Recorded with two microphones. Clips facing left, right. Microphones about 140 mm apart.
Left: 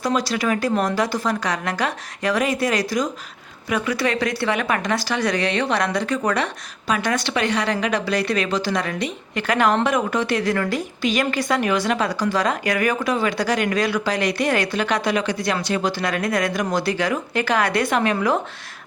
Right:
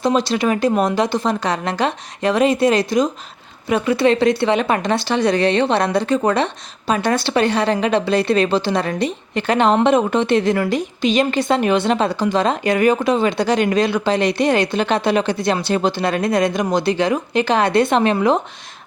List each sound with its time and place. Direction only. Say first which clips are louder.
0.0 s a woman's voice: right 4 dB; 25° right (ahead or behind)